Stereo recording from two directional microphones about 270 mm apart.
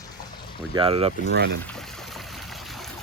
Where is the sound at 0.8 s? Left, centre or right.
Right.